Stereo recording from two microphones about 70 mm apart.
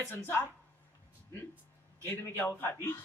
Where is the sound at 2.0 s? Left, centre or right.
Left.